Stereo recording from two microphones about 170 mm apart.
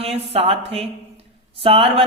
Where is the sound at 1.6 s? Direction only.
35° right (ahead or behind).